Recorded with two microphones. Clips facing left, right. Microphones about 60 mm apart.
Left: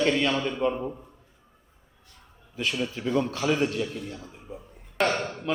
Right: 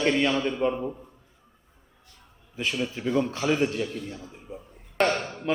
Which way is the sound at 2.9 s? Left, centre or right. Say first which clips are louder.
Right 1 dB; centre.